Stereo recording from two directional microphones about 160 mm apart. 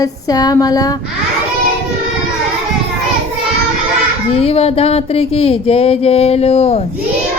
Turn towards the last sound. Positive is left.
turn(degrees=40)  # may be behind; listen again after turning